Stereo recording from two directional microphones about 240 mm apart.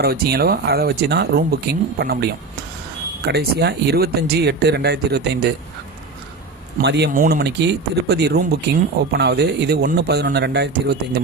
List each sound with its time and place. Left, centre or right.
0.0 s speech: right
6.7 s speech: right